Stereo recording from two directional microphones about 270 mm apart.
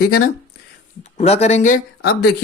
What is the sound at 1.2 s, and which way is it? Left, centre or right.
Speech, left.